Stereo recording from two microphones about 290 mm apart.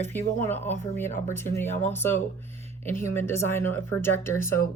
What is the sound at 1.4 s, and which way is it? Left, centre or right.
Speech, left.